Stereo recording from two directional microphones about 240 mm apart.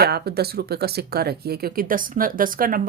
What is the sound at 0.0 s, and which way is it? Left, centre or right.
Speech, right.